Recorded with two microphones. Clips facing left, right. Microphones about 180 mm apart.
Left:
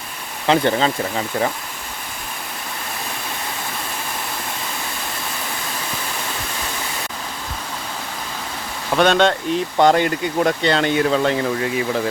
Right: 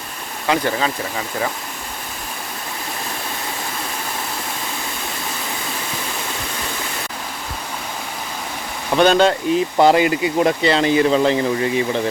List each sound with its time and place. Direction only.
0.4 s speech: 25° left (ahead or behind)
8.9 s speech: 5° right (ahead or behind)